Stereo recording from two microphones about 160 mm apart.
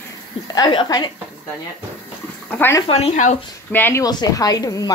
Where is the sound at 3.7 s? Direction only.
15° left (ahead or behind).